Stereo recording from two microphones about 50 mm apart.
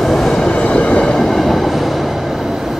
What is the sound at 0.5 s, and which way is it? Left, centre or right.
Train, left.